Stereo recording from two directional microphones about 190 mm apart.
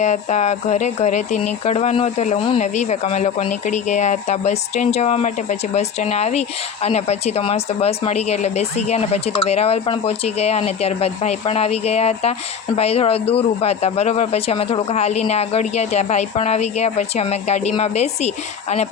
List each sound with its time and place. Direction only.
0.0 s speech: 40° left (ahead or behind)